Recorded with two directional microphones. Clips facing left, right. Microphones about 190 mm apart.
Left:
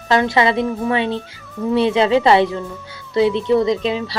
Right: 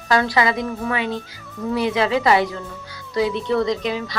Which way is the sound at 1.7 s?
25° left (ahead or behind).